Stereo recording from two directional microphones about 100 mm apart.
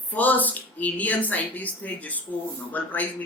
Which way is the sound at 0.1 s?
15° left (ahead or behind).